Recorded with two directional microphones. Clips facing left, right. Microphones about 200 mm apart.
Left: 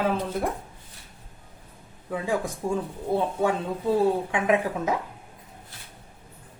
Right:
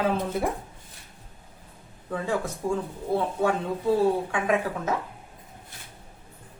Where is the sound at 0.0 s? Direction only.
Centre (ahead or behind).